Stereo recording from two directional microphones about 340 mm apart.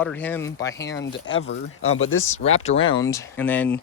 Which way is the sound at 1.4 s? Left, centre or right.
Left.